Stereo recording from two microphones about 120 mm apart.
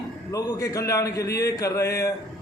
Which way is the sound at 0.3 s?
30° left (ahead or behind).